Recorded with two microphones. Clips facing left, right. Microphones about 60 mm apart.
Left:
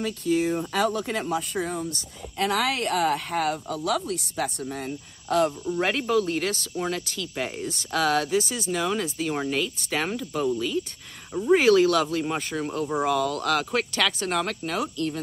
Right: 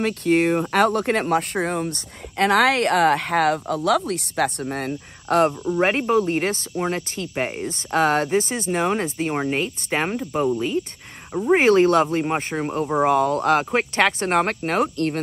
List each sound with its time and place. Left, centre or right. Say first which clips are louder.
0.0 s speech: right 5 dB; right
5.7 s speech: right 5 dB; right